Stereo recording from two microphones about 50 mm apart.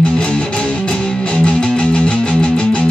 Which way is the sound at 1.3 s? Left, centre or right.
Left.